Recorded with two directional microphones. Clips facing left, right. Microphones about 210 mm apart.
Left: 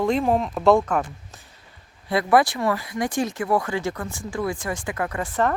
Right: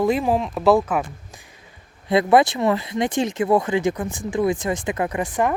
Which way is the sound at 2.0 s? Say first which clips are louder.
Right 3 dB; 20° right (ahead or behind).